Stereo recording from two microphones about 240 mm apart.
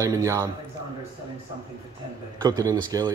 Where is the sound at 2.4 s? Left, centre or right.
Centre.